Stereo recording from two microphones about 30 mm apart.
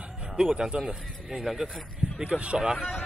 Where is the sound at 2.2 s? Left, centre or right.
Right.